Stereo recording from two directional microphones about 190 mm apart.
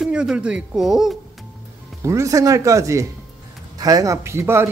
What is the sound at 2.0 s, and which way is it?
Speech, 15° right (ahead or behind).